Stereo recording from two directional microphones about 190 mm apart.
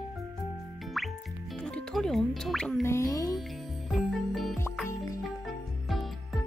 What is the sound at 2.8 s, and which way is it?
Speech, 15° left (ahead or behind).